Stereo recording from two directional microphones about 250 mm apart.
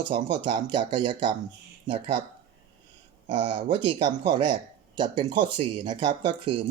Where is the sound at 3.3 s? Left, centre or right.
Centre.